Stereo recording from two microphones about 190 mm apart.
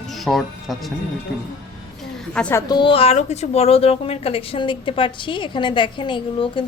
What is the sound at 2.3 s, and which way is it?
Speech, 5° left (ahead or behind).